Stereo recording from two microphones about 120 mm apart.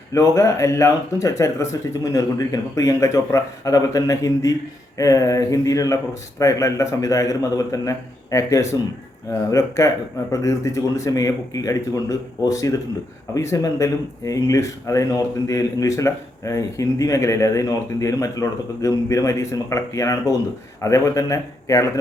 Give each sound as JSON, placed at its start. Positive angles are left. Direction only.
{"t": 0.1, "sound": "speech", "side_deg": 25}